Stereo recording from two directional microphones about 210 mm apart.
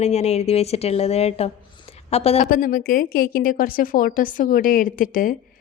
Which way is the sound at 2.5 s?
45° left (ahead or behind).